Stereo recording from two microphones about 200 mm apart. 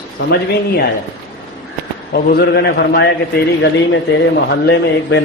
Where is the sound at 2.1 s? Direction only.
50° left (ahead or behind).